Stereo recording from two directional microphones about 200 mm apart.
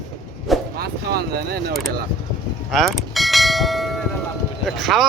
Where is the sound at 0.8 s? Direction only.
50° right (ahead or behind).